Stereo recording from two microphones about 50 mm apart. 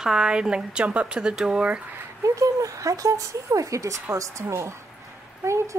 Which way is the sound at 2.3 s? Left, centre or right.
Right.